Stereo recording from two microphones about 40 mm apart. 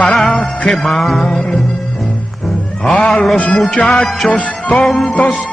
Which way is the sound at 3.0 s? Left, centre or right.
Left.